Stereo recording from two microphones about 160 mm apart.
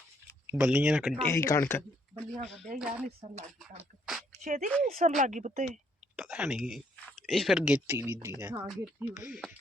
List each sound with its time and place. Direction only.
0.5 s speech: 5° right (ahead or behind)
1.3 s speech: 15° left (ahead or behind)
2.3 s speech: 45° right (ahead or behind)
2.7 s speech: 5° right (ahead or behind)
3.2 s speech: 40° right (ahead or behind)
4.4 s speech: 50° right (ahead or behind)
6.1 s speech: 5° right (ahead or behind)
7.9 s speech: 15° right (ahead or behind)
8.6 s speech: centre (ahead or behind)
9.0 s speech: 10° right (ahead or behind)